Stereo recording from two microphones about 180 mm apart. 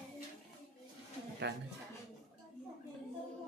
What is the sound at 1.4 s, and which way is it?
Speech, 70° right (ahead or behind).